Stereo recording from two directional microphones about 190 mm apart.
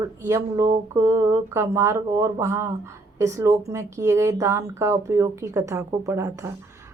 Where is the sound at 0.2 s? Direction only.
15° right (ahead or behind).